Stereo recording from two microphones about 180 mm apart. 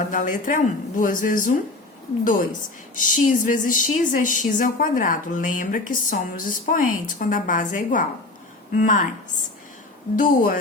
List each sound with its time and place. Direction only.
0.1 s a woman's voice: 45° left (ahead or behind)
10.2 s a woman's voice: 50° left (ahead or behind)